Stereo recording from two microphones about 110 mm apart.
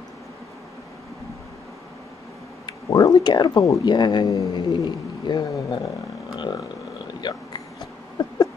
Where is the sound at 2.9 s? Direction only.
35° left (ahead or behind).